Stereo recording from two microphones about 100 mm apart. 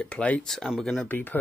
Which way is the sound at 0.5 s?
Centre (ahead or behind).